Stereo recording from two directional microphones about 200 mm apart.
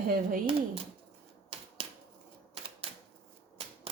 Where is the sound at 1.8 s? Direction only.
25° right (ahead or behind).